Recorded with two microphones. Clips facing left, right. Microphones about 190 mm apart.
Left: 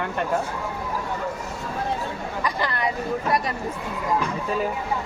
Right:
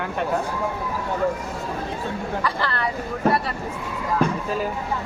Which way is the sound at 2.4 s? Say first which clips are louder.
Left 3 dB; 15° left (ahead or behind).